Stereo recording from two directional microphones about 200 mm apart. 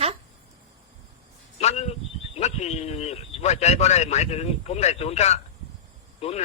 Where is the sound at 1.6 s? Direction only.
30° left (ahead or behind).